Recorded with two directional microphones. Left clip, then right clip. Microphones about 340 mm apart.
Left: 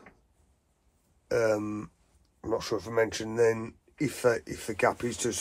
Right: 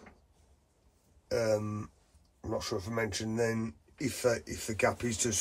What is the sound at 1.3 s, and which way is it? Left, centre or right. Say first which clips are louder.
Speech: left 4 dB; centre.